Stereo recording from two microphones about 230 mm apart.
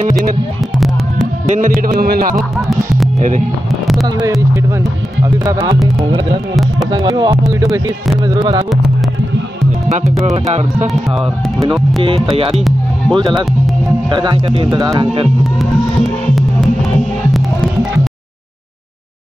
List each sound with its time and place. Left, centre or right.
1.5 s speech: right
5.2 s speech: centre
6.9 s speech: centre
12.5 s music: centre
13.2 s speech: centre